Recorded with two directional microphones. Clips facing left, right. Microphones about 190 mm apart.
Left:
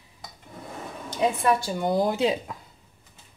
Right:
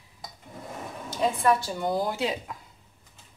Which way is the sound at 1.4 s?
15° left (ahead or behind).